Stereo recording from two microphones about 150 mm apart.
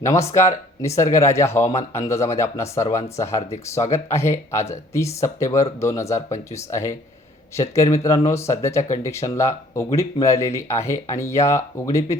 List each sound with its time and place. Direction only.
0.0 s speech: 20° left (ahead or behind)